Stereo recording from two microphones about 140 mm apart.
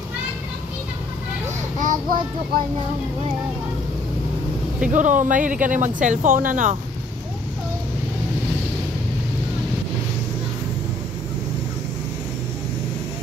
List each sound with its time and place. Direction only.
1.8 s child singing: 65° right (ahead or behind)
4.9 s speech: 65° right (ahead or behind)